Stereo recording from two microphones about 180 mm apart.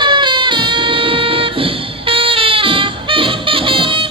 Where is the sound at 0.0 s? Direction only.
25° right (ahead or behind).